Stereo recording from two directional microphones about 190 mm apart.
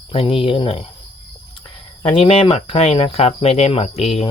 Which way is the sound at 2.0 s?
30° left (ahead or behind).